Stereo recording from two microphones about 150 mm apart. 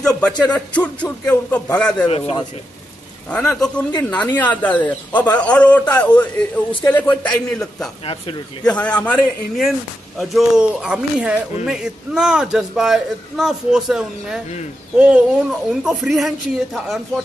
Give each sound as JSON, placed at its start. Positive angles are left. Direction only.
{"t": 0.4, "sound": "speech", "side_deg": 10}
{"t": 2.0, "sound": "speech", "side_deg": 40}
{"t": 3.3, "sound": "speech", "side_deg": 5}
{"t": 8.0, "sound": "speech", "side_deg": 35}
{"t": 8.6, "sound": "a man's voice", "side_deg": 10}